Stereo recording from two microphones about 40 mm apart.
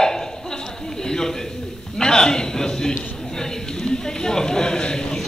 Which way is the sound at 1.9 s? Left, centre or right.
Centre.